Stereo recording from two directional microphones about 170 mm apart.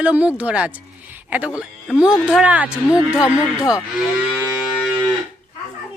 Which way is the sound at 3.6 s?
20° left (ahead or behind).